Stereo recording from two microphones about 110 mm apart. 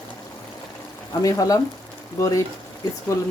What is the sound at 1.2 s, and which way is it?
Stir, 30° left (ahead or behind).